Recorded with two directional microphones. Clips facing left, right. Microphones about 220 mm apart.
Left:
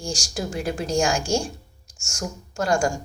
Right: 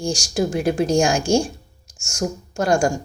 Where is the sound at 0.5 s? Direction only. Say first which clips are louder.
Right 7 dB; 65° right (ahead or behind).